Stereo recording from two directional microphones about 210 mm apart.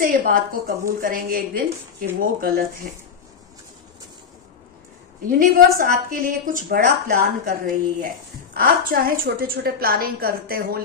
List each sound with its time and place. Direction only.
0.0 s a woman's voice: 40° right (ahead or behind)
5.2 s a woman's voice: 45° right (ahead or behind)
8.5 s a woman's voice: 40° right (ahead or behind)